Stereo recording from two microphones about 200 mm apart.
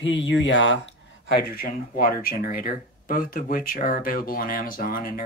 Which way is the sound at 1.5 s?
45° left (ahead or behind).